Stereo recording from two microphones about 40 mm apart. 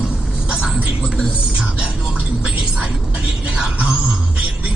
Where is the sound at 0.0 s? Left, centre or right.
Right.